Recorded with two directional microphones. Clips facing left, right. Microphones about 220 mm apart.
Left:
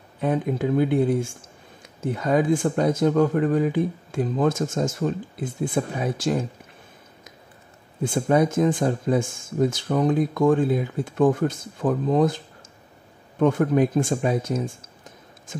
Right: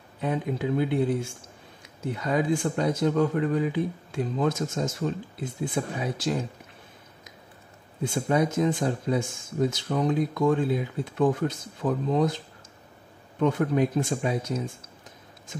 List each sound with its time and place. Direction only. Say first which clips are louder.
0.2 s speech: left 5 dB; 50° left (ahead or behind)
8.0 s speech: left 4 dB; 50° left (ahead or behind)
13.4 s speech: left 4 dB; 50° left (ahead or behind)